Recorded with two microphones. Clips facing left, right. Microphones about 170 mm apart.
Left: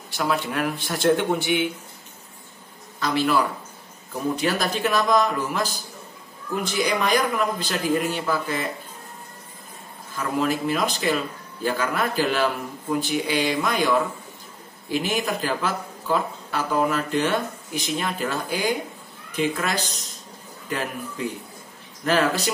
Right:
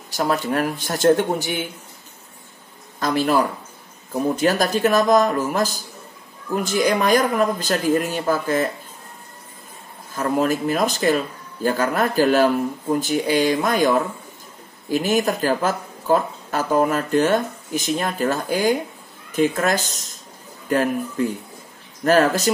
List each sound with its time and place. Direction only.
0.1 s speech: 40° right (ahead or behind)
3.0 s speech: 45° right (ahead or behind)
10.1 s speech: 45° right (ahead or behind)